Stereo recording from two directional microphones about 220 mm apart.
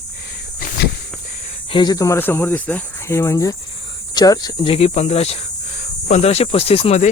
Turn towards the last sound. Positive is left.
turn(degrees=30)  # may be behind; listen again after turning